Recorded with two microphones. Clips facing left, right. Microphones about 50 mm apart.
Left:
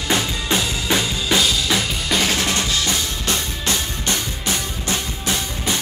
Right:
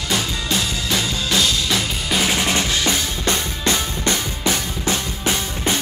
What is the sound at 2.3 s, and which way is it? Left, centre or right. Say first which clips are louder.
Drum: right 1 dB; right.